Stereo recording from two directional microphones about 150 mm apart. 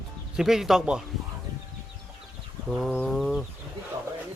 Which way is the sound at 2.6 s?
Centre (ahead or behind).